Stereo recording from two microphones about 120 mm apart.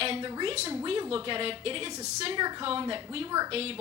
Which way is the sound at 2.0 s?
70° right (ahead or behind).